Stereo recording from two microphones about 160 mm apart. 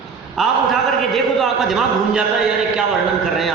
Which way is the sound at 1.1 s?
Centre (ahead or behind).